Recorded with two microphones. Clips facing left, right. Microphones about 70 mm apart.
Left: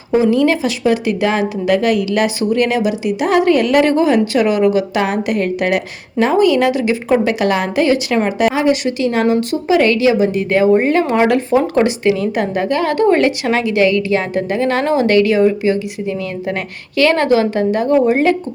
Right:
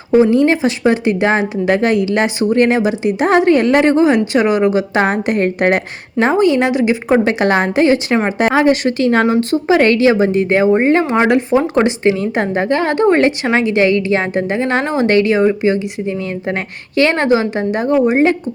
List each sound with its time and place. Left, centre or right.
0.2 s speech: right
8.4 s speech: right